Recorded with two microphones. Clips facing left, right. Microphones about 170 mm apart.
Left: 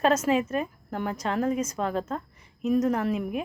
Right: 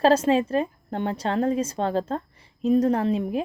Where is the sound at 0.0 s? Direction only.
30° right (ahead or behind).